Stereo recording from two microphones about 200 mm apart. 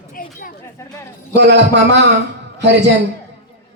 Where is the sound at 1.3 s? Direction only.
60° right (ahead or behind).